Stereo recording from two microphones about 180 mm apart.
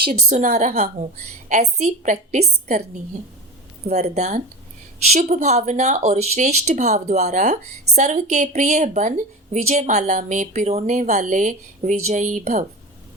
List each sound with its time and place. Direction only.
0.1 s speech: 40° right (ahead or behind)